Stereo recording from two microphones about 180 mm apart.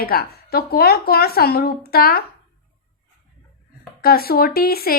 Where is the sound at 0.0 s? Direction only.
55° left (ahead or behind).